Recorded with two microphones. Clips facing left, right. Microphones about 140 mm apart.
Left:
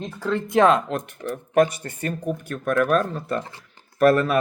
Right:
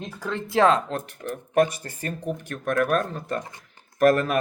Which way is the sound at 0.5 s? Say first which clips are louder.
Left 2 dB; 30° right (ahead or behind).